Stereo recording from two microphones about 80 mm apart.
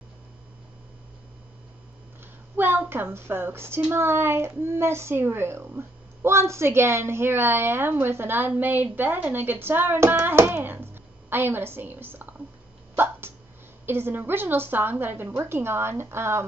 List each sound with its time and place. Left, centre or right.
2.5 s a child's voice: right
12.9 s a sound: right
13.8 s speech: right